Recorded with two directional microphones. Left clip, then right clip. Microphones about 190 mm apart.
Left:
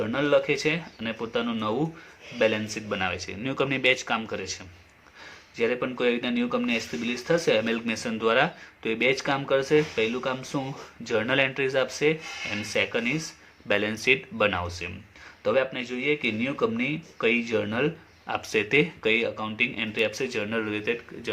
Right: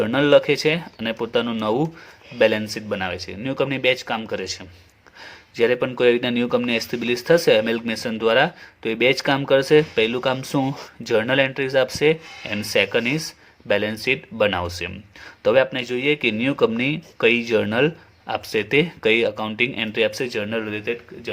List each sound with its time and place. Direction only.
0.0 s speech: 45° right (ahead or behind)
5.5 s speech: 45° right (ahead or behind)
13.7 s speech: 30° right (ahead or behind)